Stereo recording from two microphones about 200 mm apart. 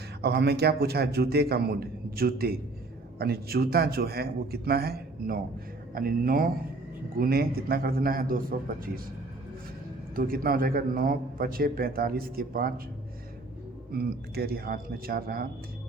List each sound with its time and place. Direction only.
0.2 s a man's voice: 55° right (ahead or behind)
10.2 s a man's voice: 45° right (ahead or behind)
13.9 s a man's voice: 50° right (ahead or behind)